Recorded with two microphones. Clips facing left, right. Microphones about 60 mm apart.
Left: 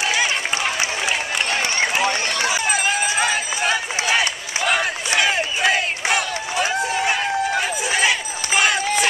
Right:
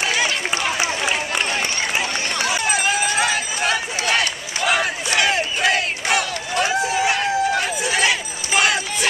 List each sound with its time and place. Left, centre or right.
0.0 s run: centre
1.0 s a sound: centre
2.4 s run: centre
4.6 s battle cry: centre